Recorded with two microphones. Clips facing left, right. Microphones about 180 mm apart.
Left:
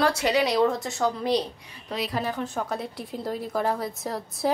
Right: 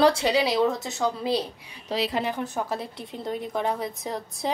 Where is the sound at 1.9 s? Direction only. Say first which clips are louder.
Right 2 dB; 25° right (ahead or behind).